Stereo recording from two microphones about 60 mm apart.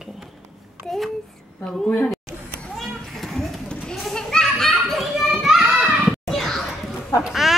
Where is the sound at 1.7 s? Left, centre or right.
Centre.